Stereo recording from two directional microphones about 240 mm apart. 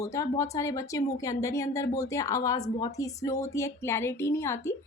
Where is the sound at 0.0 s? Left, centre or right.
Centre.